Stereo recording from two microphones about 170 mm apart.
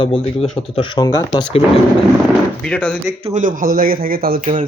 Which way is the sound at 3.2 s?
40° right (ahead or behind).